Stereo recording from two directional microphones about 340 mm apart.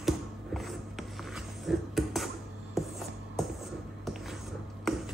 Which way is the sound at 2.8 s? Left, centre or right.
Centre.